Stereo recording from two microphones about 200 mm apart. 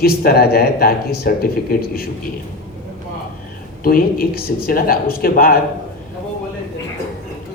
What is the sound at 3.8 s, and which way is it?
A man's voice, 45° left (ahead or behind).